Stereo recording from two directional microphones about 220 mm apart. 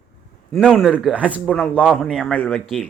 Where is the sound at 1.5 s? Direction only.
5° left (ahead or behind).